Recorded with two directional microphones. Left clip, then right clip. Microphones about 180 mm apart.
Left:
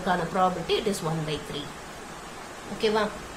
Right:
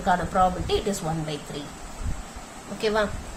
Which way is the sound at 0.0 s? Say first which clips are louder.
Right 3 dB; 15° right (ahead or behind).